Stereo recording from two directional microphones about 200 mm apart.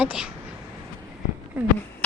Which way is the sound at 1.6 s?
5° right (ahead or behind).